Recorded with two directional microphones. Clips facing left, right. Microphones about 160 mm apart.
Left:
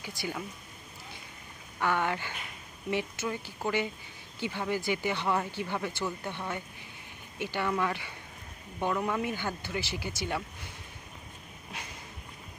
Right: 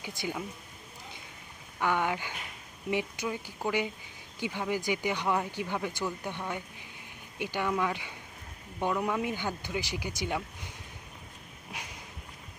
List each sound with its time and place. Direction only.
0.0 s speech: 20° right (ahead or behind)
1.8 s speech: 15° right (ahead or behind)
11.7 s walk: 15° right (ahead or behind)